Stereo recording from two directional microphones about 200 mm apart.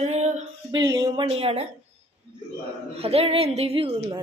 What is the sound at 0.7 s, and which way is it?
Speech, 20° right (ahead or behind).